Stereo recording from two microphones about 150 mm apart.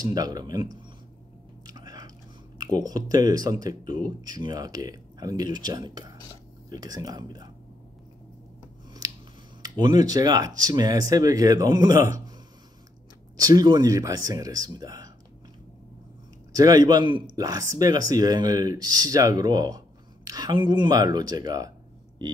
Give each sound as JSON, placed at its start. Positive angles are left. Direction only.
{"t": 0.0, "sound": "speech", "side_deg": -25}
{"t": 1.7, "sound": "biting", "side_deg": -25}
{"t": 2.6, "sound": "speech", "side_deg": -25}
{"t": 9.0, "sound": "scissors", "side_deg": -25}
{"t": 9.6, "sound": "speech", "side_deg": -25}
{"t": 13.4, "sound": "speech", "side_deg": -25}
{"t": 16.5, "sound": "speech", "side_deg": -25}